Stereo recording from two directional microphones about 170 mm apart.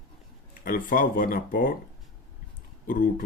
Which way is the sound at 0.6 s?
55° left (ahead or behind).